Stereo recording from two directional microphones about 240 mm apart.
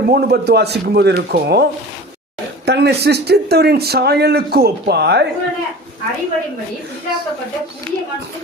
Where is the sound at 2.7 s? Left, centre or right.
Right.